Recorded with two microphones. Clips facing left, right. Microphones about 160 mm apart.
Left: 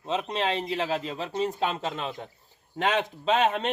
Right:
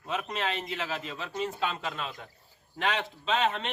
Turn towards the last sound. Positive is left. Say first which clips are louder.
# left 4 dB
turn(degrees=45)  # may be behind; listen again after turning